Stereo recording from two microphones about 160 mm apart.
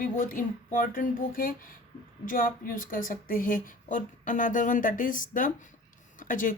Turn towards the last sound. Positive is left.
turn(degrees=55)  # may be behind; listen again after turning